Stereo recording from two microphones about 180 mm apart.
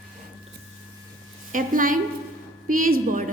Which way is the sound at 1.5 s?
50° right (ahead or behind).